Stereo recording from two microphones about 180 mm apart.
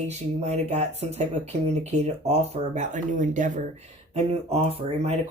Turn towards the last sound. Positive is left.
turn(degrees=-35)  # may be behind; listen again after turning